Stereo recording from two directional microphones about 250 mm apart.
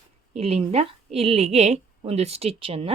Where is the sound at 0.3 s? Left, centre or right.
Right.